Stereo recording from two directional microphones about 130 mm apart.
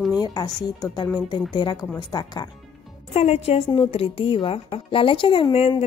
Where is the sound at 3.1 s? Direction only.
55° left (ahead or behind).